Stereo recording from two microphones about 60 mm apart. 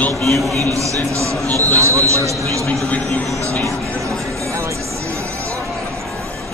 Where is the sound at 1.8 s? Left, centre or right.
Right.